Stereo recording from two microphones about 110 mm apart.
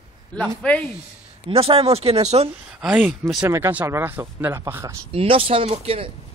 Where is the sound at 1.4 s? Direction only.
60° right (ahead or behind); by 2.5 s 75° right (ahead or behind).